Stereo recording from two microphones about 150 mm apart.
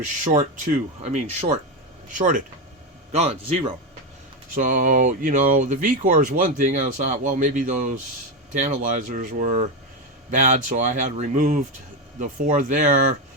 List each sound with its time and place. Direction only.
0.3 s speech: 60° right (ahead or behind)
2.1 s speech: 60° right (ahead or behind)
3.1 s speech: 45° right (ahead or behind)
4.5 s speech: 60° right (ahead or behind)